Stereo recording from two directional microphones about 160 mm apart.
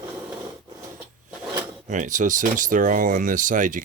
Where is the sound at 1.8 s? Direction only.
50° right (ahead or behind).